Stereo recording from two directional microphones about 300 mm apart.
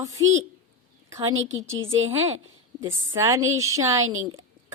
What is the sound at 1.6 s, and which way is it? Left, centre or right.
Speech, right.